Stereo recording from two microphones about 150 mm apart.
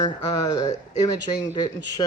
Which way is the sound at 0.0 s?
30° left (ahead or behind).